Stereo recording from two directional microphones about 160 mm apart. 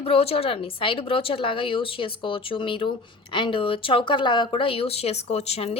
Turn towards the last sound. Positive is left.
turn(degrees=40)  # may be behind; listen again after turning